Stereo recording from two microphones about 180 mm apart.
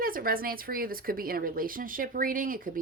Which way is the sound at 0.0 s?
55° right (ahead or behind).